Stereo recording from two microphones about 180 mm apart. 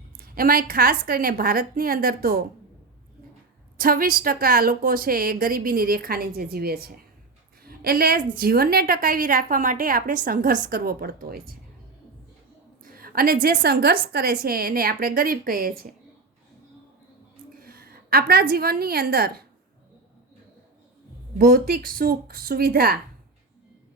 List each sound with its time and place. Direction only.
0.2 s a woman's voice: 55° right (ahead or behind)
3.8 s a woman's voice: 55° right (ahead or behind)
7.6 s a sound: 60° right (ahead or behind)
8.4 s a woman's voice: 55° right (ahead or behind)
12.8 s a woman's voice: 55° right (ahead or behind)
17.6 s a woman's voice: 55° right (ahead or behind)
21.3 s a woman's voice: 55° right (ahead or behind)